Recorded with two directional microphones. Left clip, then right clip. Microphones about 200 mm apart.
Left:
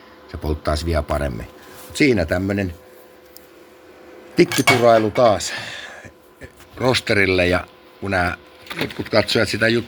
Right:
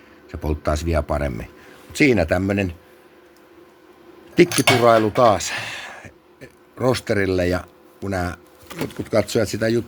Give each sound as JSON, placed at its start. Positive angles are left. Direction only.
{"t": 0.3, "sound": "speech", "side_deg": -5}
{"t": 4.4, "sound": "speech", "side_deg": -5}
{"t": 4.8, "sound": "a sound", "side_deg": -10}
{"t": 6.7, "sound": "speech", "side_deg": -20}